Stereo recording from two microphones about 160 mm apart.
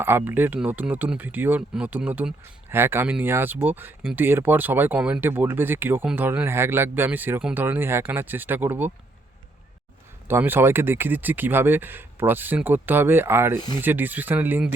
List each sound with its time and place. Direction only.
0.0 s speech: 15° right (ahead or behind)
10.2 s speech: 15° right (ahead or behind)
13.6 s speech: 25° left (ahead or behind)
13.8 s speech: 10° right (ahead or behind)